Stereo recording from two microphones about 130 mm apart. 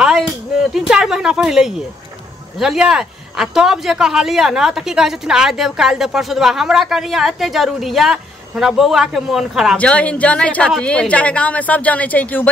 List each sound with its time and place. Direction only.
0.0 s a sound: 5° right (ahead or behind)
2.6 s a man's voice: 5° right (ahead or behind)
9.8 s speech: 10° left (ahead or behind)